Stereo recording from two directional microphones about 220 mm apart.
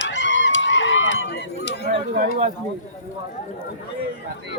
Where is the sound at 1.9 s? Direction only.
40° right (ahead or behind).